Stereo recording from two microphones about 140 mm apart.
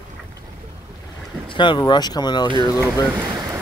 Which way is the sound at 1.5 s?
35° left (ahead or behind).